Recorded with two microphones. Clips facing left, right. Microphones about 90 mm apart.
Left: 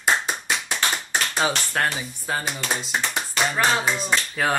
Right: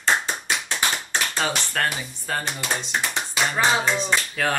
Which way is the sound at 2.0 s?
5° left (ahead or behind).